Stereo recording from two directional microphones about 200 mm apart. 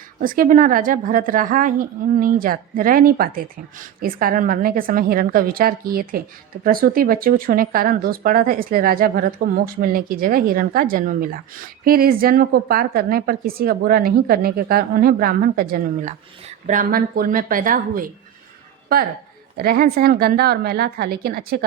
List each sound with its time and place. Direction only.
0.2 s speech: 45° right (ahead or behind)
19.5 s speech: 50° right (ahead or behind)